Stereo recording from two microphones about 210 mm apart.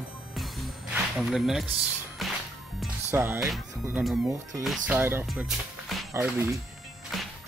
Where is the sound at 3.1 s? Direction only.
10° right (ahead or behind).